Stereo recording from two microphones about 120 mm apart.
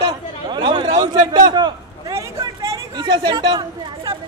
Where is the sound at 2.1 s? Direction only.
25° right (ahead or behind).